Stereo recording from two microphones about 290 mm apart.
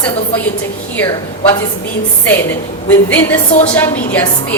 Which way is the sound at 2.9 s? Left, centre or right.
Centre.